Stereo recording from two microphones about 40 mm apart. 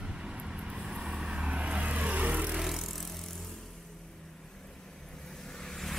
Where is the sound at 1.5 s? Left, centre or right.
Right.